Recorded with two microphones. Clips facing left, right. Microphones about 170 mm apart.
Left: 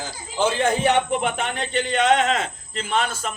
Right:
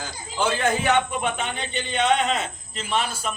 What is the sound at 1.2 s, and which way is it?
Speech, 90° left.